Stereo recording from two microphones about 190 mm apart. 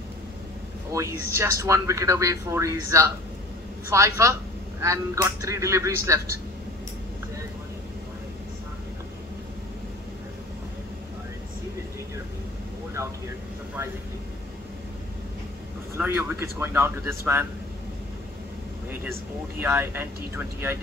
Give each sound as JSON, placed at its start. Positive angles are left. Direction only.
{"t": 0.9, "sound": "speech", "side_deg": -15}
{"t": 16.0, "sound": "speech", "side_deg": -10}
{"t": 19.6, "sound": "speech", "side_deg": -10}